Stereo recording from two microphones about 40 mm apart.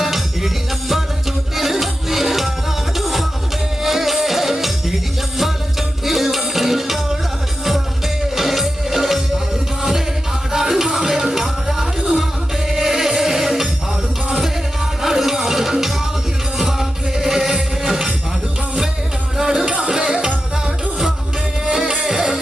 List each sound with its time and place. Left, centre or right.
0.0 s music: centre
6.1 s music: centre
10.5 s music: centre
19.4 s music: centre
21.7 s music: centre